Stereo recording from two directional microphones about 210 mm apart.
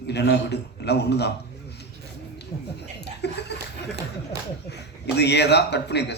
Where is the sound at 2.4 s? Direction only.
50° left (ahead or behind).